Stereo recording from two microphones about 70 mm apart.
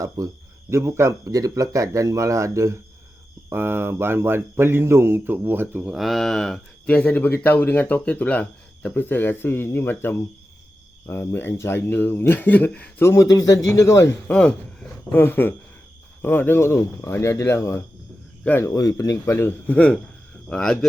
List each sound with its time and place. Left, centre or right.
0.2 s speech: right
0.7 s speech: right
1.3 s speech: right
3.5 s speech: right
6.0 s speech: centre
6.8 s speech: centre
13.0 s speech: left
13.3 s speech: left
14.3 s a man's voice: centre
15.1 s speech: left
17.1 s speech: left
18.6 s speech: left
19.2 s speech: left
20.5 s a man's voice: centre